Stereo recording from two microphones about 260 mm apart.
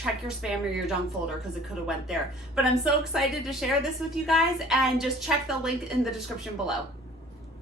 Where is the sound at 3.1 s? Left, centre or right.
Centre.